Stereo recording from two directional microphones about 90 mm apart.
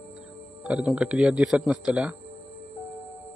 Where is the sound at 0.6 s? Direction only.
10° right (ahead or behind).